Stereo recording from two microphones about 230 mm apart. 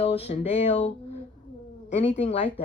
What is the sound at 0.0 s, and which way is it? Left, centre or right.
Speech, left.